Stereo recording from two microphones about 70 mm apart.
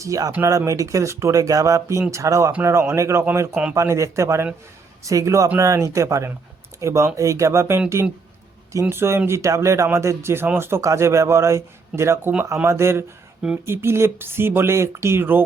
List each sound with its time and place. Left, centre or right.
0.0 s speech: right
3.5 s speech: centre
3.8 s speech: right